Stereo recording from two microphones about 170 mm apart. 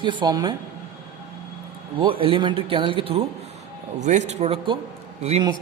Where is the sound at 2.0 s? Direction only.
30° right (ahead or behind).